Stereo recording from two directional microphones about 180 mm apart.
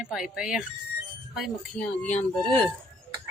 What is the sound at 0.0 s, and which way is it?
Speech, 5° right (ahead or behind).